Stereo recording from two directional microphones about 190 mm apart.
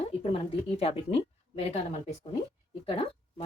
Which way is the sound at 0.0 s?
30° left (ahead or behind).